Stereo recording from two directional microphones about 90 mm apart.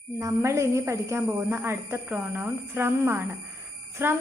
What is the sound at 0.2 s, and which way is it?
A woman's voice, 35° right (ahead or behind).